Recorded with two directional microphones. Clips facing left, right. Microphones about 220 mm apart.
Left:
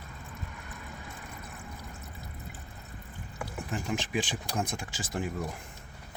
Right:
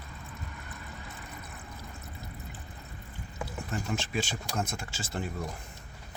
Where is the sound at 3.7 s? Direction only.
15° left (ahead or behind).